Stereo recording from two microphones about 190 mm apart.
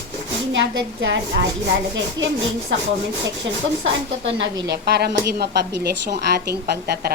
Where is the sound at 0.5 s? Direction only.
90° right; by 2.8 s 75° right (ahead or behind).